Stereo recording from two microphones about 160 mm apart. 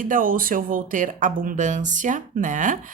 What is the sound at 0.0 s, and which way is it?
Speech, 55° right (ahead or behind).